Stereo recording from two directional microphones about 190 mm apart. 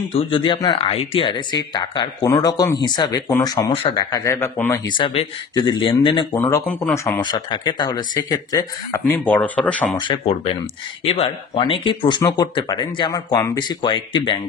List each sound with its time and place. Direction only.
0.2 s speech: 25° left (ahead or behind)
4.8 s speech: 25° left (ahead or behind); by 9.9 s 5° left (ahead or behind)
9.9 s speech: 25° left (ahead or behind)